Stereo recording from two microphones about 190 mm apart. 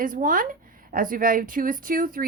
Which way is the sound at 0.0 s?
45° right (ahead or behind).